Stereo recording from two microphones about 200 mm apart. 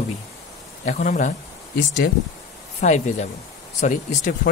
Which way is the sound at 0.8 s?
40° left (ahead or behind).